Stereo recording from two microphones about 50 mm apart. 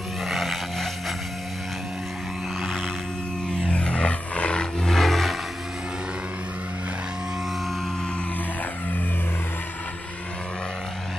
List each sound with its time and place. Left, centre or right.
0.2 s vehicle: centre
3.5 s vehicle: centre
4.9 s vehicle: centre